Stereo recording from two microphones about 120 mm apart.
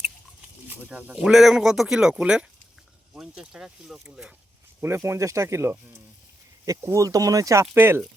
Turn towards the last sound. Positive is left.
turn(degrees=-20)  # may be behind; listen again after turning